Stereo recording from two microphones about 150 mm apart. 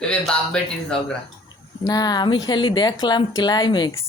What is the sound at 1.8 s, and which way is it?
Speech, 25° left (ahead or behind).